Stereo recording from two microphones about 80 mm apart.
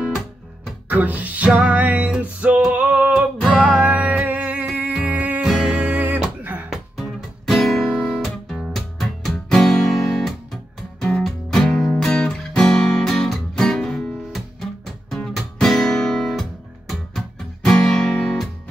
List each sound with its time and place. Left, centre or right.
0.8 s music: centre
6.7 s music: centre
9.5 s guitar: centre
16.3 s music: centre